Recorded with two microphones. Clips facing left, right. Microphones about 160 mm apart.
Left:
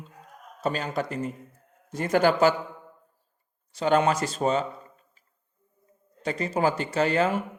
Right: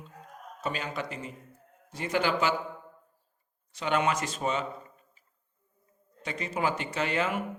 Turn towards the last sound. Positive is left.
turn(degrees=35)  # may be behind; listen again after turning